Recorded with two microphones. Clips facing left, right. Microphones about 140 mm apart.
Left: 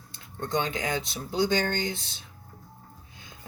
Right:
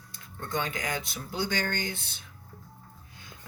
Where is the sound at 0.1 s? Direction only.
25° left (ahead or behind).